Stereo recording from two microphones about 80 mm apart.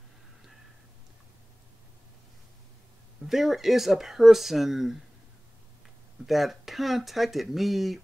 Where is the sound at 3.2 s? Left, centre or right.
Centre.